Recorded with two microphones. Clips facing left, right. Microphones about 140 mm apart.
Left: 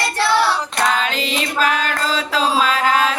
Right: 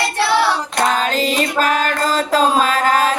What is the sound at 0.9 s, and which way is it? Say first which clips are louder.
Mantra: right 4 dB; 40° right (ahead or behind).